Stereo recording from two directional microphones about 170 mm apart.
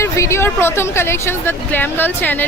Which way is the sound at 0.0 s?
15° left (ahead or behind).